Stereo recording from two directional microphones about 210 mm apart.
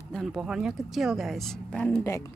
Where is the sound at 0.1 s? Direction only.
Centre (ahead or behind).